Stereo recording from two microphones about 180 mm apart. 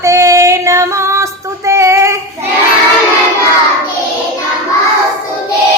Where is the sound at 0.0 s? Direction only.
15° right (ahead or behind).